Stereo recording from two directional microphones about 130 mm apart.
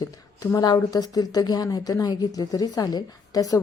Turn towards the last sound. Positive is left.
turn(degrees=30)  # may be behind; listen again after turning